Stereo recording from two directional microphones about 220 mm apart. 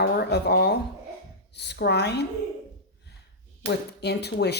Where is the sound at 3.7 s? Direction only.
50° left (ahead or behind).